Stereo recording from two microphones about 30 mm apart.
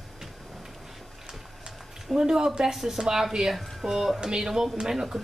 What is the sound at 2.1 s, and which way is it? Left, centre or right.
Speech, right.